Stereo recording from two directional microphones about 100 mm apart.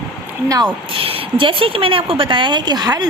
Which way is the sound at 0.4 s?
35° right (ahead or behind).